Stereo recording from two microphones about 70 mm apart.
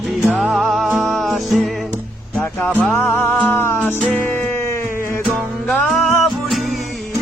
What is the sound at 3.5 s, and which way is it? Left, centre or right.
Music, left.